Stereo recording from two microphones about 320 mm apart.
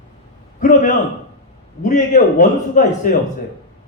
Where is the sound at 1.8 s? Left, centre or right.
Left.